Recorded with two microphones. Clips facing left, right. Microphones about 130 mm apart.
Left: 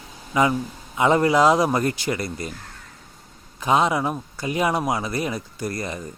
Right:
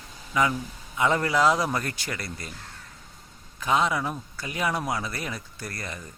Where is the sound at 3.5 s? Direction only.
20° left (ahead or behind).